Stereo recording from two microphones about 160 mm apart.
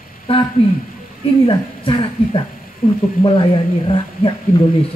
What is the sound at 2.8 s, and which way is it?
Speech, 60° left (ahead or behind).